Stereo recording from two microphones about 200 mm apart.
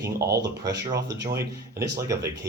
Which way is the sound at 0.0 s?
50° right (ahead or behind).